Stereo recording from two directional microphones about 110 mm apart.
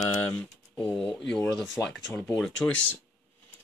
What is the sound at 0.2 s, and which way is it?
Speech, 10° left (ahead or behind).